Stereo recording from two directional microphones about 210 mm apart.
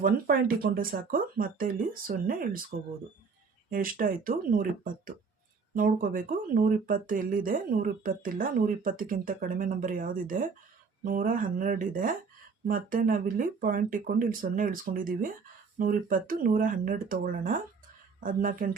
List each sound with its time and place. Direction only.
0.0 s speech: 45° right (ahead or behind)